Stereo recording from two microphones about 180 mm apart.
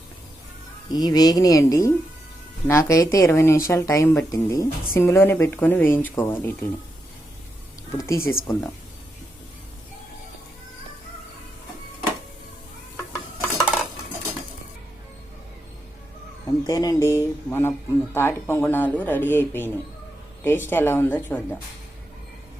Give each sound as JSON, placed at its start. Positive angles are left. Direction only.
{"t": 0.9, "sound": "speech", "side_deg": 20}
{"t": 7.9, "sound": "speech", "side_deg": 15}
{"t": 16.5, "sound": "speech", "side_deg": 20}